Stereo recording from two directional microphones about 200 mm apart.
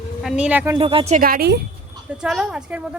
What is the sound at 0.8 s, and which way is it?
Speech, 25° right (ahead or behind).